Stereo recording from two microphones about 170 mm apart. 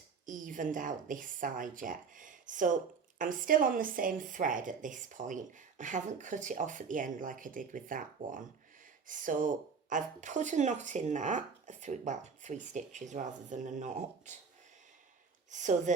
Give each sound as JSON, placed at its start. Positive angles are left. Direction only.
{"t": 0.3, "sound": "a woman's voice", "side_deg": -50}
{"t": 15.4, "sound": "a woman's voice", "side_deg": -45}